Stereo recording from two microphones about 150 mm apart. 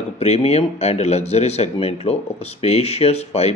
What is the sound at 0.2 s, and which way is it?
Speech, 45° left (ahead or behind).